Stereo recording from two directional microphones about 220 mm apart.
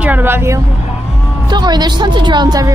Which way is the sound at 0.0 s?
10° right (ahead or behind).